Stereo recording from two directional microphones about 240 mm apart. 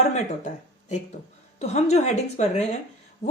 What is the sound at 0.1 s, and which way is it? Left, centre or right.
A woman's voice, left.